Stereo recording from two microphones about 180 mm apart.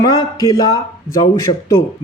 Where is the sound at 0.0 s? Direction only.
20° left (ahead or behind).